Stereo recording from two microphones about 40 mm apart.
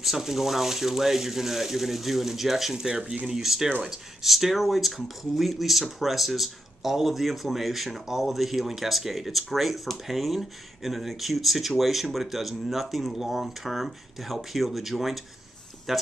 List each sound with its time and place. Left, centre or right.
0.0 s speech: centre
2.9 s speech: right
3.3 s speech: centre